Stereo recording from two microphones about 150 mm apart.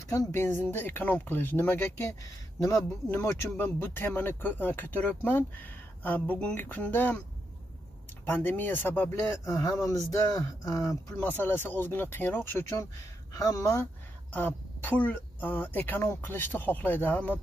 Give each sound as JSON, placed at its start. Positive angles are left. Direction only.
{"t": 0.1, "sound": "speech", "side_deg": 20}
{"t": 8.3, "sound": "speech", "side_deg": 15}